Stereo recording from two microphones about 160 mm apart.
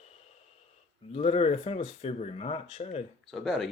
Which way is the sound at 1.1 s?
40° left (ahead or behind).